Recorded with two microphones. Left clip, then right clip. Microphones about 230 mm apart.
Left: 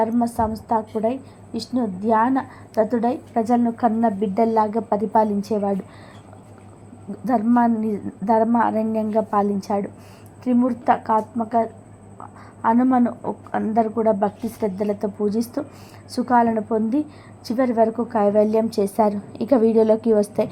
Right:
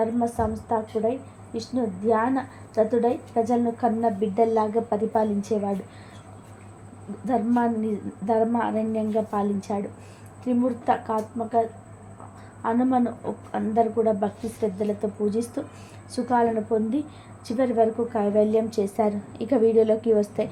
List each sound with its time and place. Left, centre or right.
0.0 s a woman's voice: left
7.3 s a woman's voice: centre
12.6 s a woman's voice: left